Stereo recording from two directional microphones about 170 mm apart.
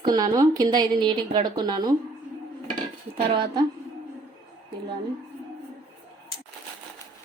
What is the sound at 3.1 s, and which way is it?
Speech, 30° right (ahead or behind).